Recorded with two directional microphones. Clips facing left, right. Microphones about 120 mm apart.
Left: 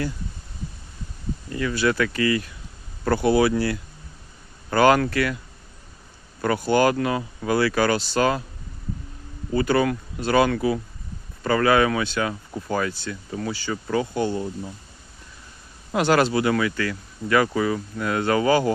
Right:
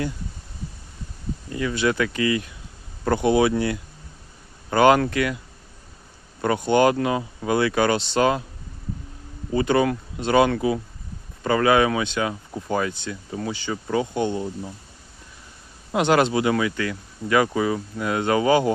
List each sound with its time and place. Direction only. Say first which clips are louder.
1.5 s speech: even; 20° right (ahead or behind)
6.4 s speech: right 1 dB; 20° right (ahead or behind)
9.5 s speech: right 1 dB; 20° right (ahead or behind)
15.9 s speech: even; 20° right (ahead or behind)